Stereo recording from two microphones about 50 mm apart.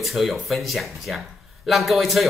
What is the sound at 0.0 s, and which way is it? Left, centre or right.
Speech, centre.